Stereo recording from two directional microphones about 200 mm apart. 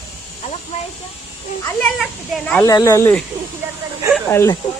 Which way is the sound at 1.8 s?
5° left (ahead or behind).